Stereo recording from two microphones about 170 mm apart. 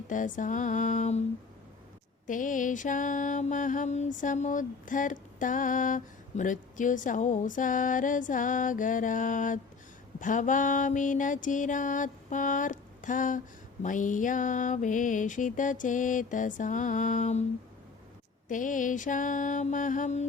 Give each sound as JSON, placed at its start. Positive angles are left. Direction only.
{"t": 0.1, "sound": "mantra", "side_deg": 50}
{"t": 2.2, "sound": "mantra", "side_deg": 50}
{"t": 18.4, "sound": "mantra", "side_deg": 50}